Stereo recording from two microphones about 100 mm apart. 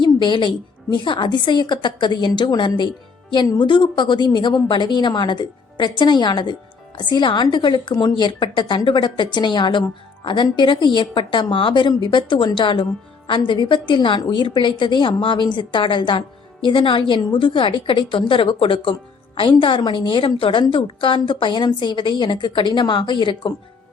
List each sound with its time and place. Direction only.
0.0 s a woman's voice: 50° left (ahead or behind)